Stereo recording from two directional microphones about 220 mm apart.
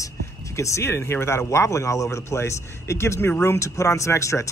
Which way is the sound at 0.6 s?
10° left (ahead or behind).